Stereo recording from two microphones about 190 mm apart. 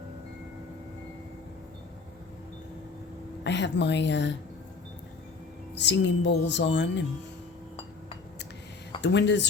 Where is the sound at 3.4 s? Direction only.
65° left (ahead or behind).